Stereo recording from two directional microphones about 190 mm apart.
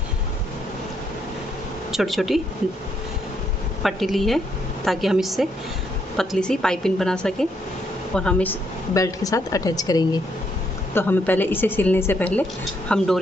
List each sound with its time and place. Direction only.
1.9 s a woman's voice: centre (ahead or behind)
3.8 s a woman's voice: centre (ahead or behind)